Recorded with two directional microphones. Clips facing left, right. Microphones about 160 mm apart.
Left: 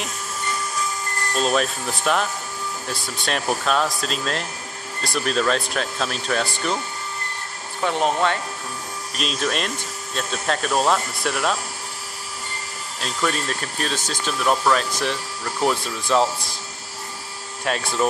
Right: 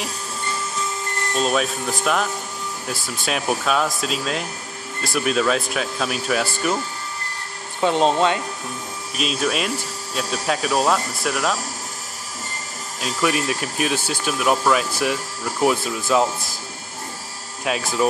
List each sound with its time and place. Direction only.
1.4 s speech: centre (ahead or behind)
7.8 s speech: 20° right (ahead or behind)
9.1 s speech: 5° right (ahead or behind)
13.0 s speech: 10° right (ahead or behind)
17.6 s speech: 5° right (ahead or behind)